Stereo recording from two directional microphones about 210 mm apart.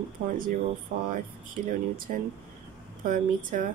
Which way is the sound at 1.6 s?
40° right (ahead or behind).